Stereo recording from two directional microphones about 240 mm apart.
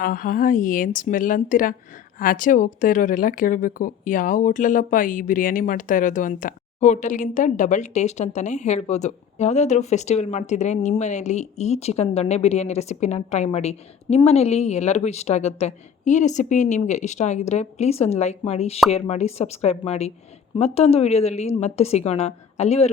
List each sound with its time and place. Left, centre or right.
0.0 s a woman's voice: left